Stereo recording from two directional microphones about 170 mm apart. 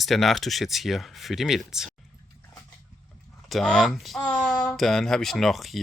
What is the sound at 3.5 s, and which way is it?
Speech, centre (ahead or behind).